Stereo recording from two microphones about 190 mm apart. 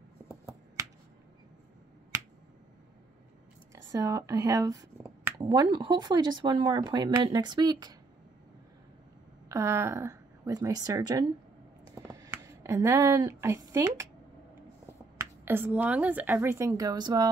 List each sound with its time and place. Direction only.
3.9 s speech: 20° right (ahead or behind)
9.5 s speech: 15° right (ahead or behind)
11.9 s a sound: 15° right (ahead or behind)
15.1 s speech: 10° right (ahead or behind)